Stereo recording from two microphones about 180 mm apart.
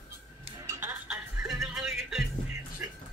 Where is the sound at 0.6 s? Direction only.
15° right (ahead or behind).